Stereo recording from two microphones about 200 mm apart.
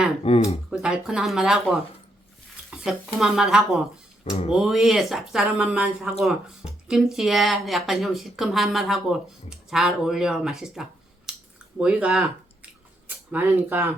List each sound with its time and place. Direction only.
0.3 s a sound: 30° left (ahead or behind)
0.7 s a woman's voice: 5° right (ahead or behind)
4.2 s speech: 35° left (ahead or behind)
4.5 s a woman's voice: centre (ahead or behind)
13.3 s speech: 10° right (ahead or behind)